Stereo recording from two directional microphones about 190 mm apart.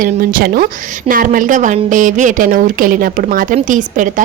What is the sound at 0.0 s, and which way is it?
A woman's voice, 50° right (ahead or behind).